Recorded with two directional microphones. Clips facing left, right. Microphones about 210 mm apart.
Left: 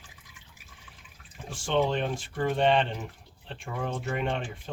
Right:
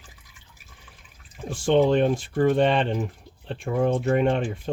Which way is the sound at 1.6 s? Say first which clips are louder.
Right 8 dB; 40° right (ahead or behind).